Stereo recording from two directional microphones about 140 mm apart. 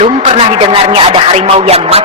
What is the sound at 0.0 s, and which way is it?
Speech, 45° right (ahead or behind).